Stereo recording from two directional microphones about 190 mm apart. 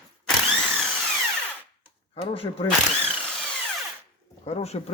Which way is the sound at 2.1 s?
30° left (ahead or behind).